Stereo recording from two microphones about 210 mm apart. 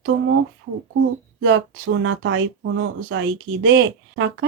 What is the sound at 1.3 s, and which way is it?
Speech, 65° right (ahead or behind).